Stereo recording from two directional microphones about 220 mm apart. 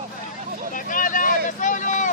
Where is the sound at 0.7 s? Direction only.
35° left (ahead or behind).